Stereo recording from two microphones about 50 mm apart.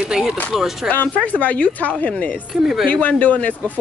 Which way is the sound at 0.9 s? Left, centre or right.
Left.